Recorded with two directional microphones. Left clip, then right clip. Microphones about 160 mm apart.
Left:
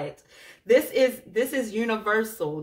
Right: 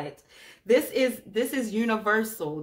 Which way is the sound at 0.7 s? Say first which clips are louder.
Left 3 dB; 40° right (ahead or behind).